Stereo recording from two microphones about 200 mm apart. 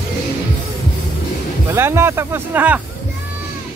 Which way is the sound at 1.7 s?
15° right (ahead or behind).